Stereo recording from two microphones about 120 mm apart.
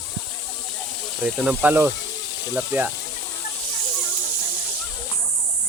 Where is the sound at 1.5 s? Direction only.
15° right (ahead or behind).